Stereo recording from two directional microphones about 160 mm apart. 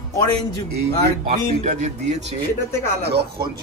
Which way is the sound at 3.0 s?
90° right.